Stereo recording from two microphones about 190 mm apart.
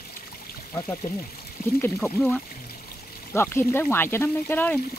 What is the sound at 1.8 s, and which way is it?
Speech, 10° left (ahead or behind).